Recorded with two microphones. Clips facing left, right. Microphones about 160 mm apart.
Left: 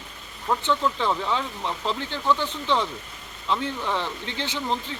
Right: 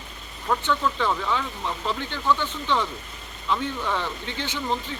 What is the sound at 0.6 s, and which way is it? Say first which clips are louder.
Speech: left 1 dB; 25° left (ahead or behind).